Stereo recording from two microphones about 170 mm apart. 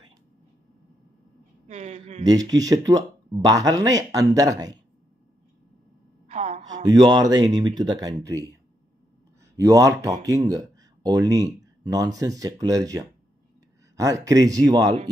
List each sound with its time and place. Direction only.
1.7 s speech: 40° right (ahead or behind)
2.2 s speech: 25° right (ahead or behind)
6.2 s a sound: 40° right (ahead or behind)
6.7 s speech: 25° right (ahead or behind)
9.6 s speech: 20° right (ahead or behind)